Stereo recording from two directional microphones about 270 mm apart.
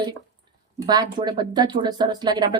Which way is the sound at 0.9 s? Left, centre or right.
Centre.